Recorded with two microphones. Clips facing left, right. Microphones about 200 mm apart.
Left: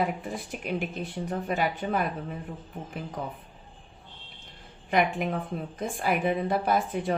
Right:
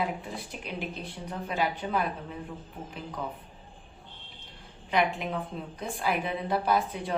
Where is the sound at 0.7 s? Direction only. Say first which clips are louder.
Left 5 dB; 50° left (ahead or behind).